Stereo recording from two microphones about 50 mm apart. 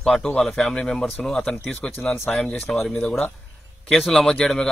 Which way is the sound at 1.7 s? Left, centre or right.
Left.